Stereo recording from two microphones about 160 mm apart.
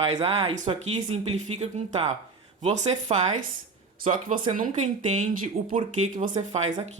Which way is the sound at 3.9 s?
55° right (ahead or behind).